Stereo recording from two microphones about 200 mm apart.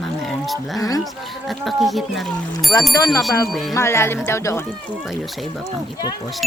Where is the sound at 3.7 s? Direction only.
15° left (ahead or behind).